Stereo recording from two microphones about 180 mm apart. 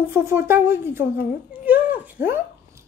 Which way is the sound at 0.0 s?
15° right (ahead or behind).